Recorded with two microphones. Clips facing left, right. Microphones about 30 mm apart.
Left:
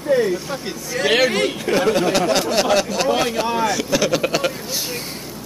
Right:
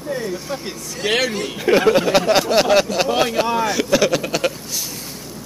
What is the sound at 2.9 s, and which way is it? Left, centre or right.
Speech, centre.